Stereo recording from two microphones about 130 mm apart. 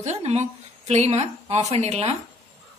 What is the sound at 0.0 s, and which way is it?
A woman's voice, 55° right (ahead or behind).